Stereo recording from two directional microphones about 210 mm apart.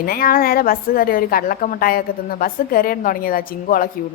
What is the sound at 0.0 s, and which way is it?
A woman's voice, 45° left (ahead or behind).